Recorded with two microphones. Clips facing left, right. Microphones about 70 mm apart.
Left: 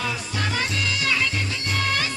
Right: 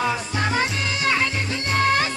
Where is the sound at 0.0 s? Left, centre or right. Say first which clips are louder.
Right 4 dB; right.